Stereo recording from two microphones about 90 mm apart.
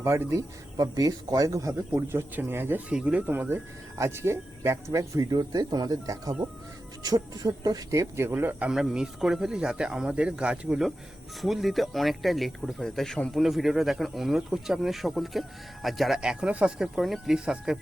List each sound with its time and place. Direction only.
0.0 s speech: 30° right (ahead or behind)
2.1 s speech: 25° right (ahead or behind)
2.9 s speech: 10° right (ahead or behind)
3.9 s speech: 30° right (ahead or behind)
8.7 s speech: 5° right (ahead or behind)